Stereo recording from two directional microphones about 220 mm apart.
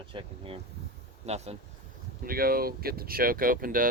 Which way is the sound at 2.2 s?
40° right (ahead or behind).